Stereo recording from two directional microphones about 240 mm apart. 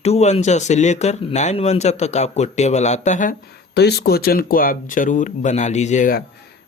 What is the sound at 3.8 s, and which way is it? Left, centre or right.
Speech, left.